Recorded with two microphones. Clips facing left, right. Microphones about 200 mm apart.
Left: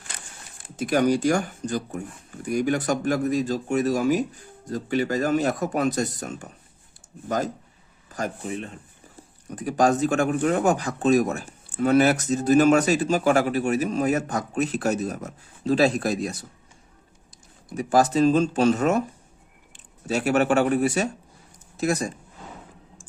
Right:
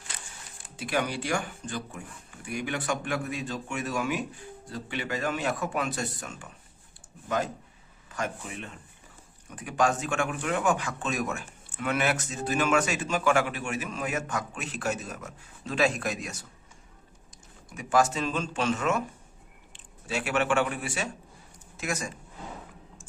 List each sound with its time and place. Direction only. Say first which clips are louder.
0.8 s speech: left 9 dB; 45° left (ahead or behind)